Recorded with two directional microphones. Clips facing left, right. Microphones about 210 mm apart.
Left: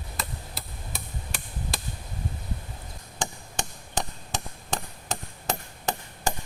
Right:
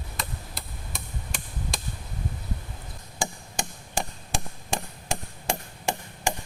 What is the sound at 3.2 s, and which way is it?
Chop, 10° right (ahead or behind).